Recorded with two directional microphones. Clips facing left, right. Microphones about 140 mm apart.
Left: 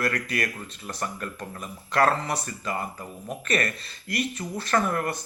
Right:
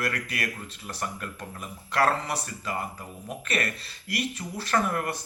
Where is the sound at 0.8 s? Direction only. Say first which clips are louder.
Left 2 dB; 40° left (ahead or behind).